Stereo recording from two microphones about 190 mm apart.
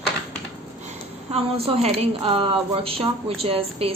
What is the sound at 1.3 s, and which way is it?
A woman's voice, 35° right (ahead or behind).